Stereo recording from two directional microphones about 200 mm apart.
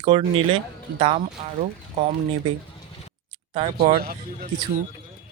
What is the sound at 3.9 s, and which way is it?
Speech, 50° right (ahead or behind).